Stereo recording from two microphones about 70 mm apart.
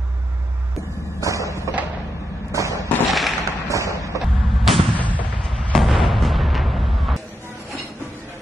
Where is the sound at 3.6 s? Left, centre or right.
Right.